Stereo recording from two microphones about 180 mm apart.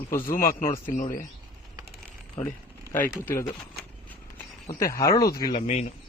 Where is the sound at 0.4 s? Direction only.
50° left (ahead or behind).